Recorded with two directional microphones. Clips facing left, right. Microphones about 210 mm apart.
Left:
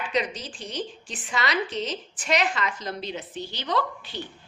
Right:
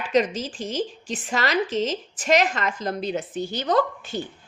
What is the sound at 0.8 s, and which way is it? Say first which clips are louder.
A woman's voice: right 4 dB; 40° right (ahead or behind).